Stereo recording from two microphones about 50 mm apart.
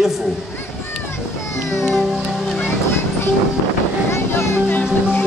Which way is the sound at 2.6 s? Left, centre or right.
Left.